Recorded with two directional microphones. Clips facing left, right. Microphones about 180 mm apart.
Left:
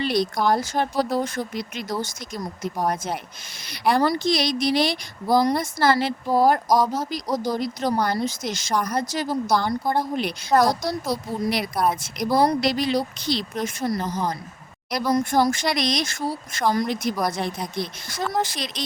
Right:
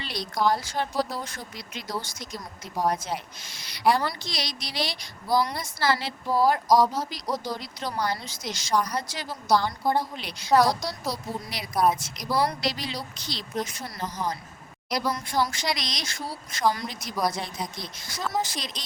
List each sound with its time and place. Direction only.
0.0 s speech: 55° left (ahead or behind)
11.1 s speech: 60° left (ahead or behind)
11.7 s a woman's voice: centre (ahead or behind)
11.9 s speech: 55° left (ahead or behind)